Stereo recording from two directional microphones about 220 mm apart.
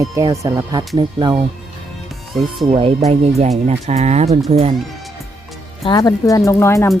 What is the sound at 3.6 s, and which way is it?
Speech, 30° right (ahead or behind).